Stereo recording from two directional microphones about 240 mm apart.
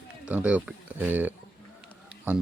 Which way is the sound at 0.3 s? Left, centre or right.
Centre.